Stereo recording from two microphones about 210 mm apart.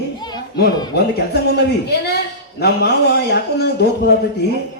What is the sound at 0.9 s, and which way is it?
A man's voice, 50° left (ahead or behind).